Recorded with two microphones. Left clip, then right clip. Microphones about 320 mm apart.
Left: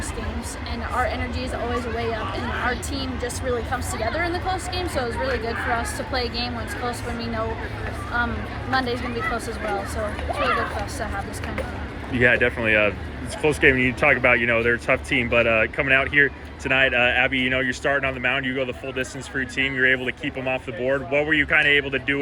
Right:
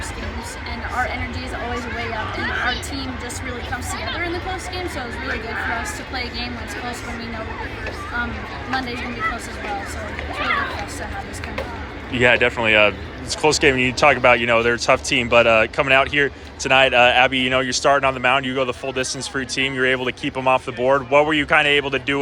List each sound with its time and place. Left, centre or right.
8.7 s speech: centre
12.1 s speech: centre